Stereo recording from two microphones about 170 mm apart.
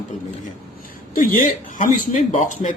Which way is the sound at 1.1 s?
55° left (ahead or behind).